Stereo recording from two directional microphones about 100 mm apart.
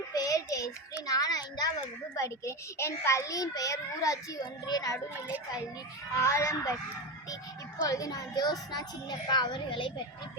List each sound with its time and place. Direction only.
0.1 s a sound: 35° left (ahead or behind)
1.0 s a child's voice: 40° left (ahead or behind)
2.1 s a child's voice: 30° left (ahead or behind)
6.1 s speech: 30° left (ahead or behind)
7.9 s a child's voice: 35° left (ahead or behind); by 9.9 s 55° left (ahead or behind)